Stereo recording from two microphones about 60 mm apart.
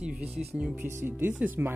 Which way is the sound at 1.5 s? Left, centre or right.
Right.